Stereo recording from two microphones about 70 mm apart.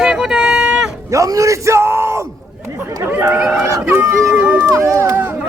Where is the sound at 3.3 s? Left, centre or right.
Centre.